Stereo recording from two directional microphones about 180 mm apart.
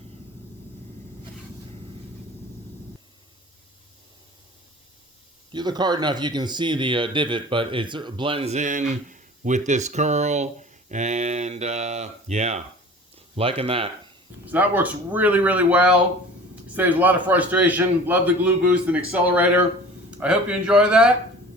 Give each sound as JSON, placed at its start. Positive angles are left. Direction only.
{"t": 5.5, "sound": "speech", "side_deg": -25}
{"t": 14.4, "sound": "a man's voice", "side_deg": -10}